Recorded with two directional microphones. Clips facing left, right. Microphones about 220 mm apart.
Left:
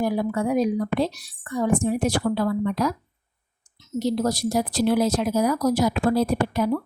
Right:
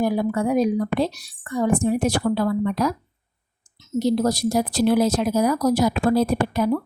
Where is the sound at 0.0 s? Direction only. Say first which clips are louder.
Right 2 dB; 40° right (ahead or behind).